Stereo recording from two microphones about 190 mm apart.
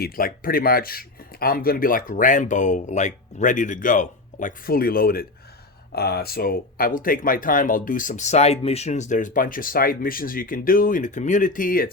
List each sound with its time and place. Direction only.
0.0 s speech: 50° left (ahead or behind)